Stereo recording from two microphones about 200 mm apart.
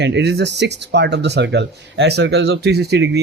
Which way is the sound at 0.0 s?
60° right (ahead or behind).